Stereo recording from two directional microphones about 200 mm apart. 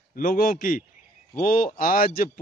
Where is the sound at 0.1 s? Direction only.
45° left (ahead or behind).